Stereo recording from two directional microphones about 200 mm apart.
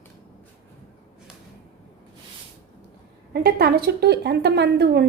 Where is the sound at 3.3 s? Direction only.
50° right (ahead or behind).